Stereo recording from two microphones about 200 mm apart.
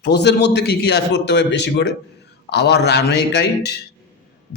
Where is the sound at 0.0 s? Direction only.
55° left (ahead or behind).